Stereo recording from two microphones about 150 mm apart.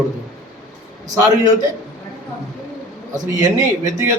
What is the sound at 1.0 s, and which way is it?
Speech, 25° right (ahead or behind).